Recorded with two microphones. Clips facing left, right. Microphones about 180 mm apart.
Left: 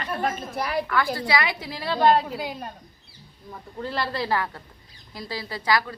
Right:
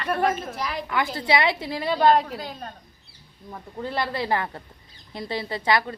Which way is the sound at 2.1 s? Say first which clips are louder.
Even; 10° left (ahead or behind).